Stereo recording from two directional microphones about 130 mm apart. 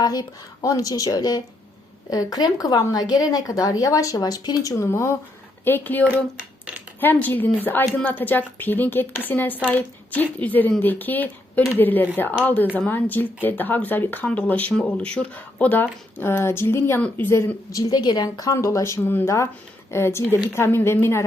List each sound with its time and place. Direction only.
0.0 s a woman's voice: 30° left (ahead or behind); by 6.1 s 15° left (ahead or behind)
6.1 s a sound: 10° right (ahead or behind)
7.0 s a woman's voice: 15° left (ahead or behind)